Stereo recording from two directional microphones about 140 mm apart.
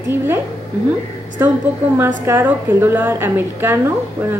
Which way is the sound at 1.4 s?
15° right (ahead or behind).